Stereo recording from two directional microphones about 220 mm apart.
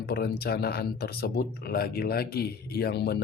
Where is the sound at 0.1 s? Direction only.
45° left (ahead or behind).